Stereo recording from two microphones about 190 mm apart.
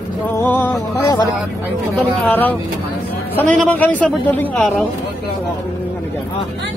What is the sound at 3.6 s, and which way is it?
Speech, 10° left (ahead or behind).